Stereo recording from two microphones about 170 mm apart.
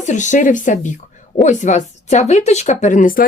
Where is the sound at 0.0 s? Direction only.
45° left (ahead or behind).